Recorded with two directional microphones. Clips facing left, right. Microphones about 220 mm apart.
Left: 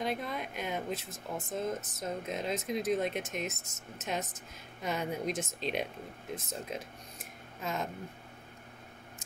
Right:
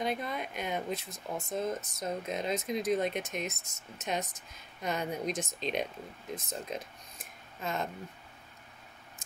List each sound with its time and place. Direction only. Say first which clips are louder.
0.0 s speech: right 1 dB; centre (ahead or behind)